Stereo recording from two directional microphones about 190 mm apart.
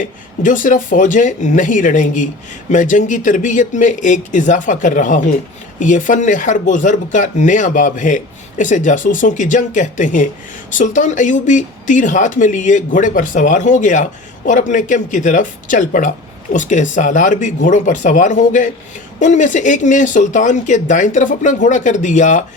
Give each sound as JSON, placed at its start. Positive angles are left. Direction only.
{"t": 0.0, "sound": "speech", "side_deg": 45}